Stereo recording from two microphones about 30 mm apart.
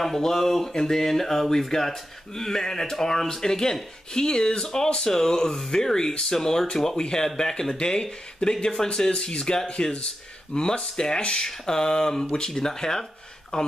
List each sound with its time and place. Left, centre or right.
0.2 s speech: centre